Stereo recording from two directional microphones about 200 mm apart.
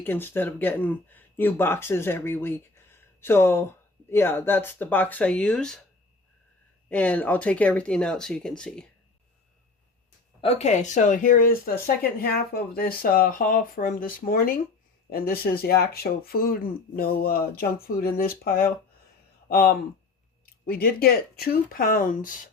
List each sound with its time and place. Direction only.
0.0 s speech: 10° left (ahead or behind)
6.8 s speech: 5° left (ahead or behind)
10.4 s speech: 30° left (ahead or behind)